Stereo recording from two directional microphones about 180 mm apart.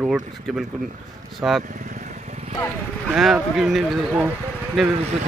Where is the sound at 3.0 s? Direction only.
Centre (ahead or behind).